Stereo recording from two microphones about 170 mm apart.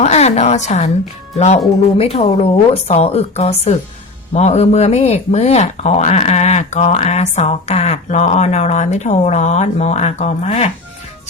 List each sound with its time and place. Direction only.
0.0 s a woman's voice: 40° left (ahead or behind)
2.0 s speech: 35° left (ahead or behind)